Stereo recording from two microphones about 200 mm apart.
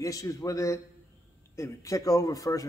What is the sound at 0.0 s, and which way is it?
Speech, 15° left (ahead or behind).